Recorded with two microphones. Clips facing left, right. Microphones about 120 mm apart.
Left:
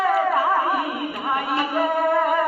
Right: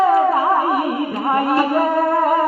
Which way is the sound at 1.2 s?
45° right (ahead or behind).